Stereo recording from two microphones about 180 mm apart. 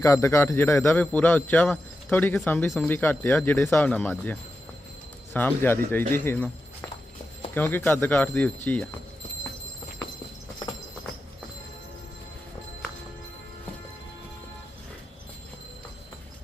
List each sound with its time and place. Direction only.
0.0 s a man's voice: 15° left (ahead or behind)
7.5 s a man's voice: 10° left (ahead or behind)